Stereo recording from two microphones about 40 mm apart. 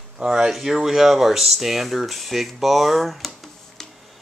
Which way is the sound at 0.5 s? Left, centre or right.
Centre.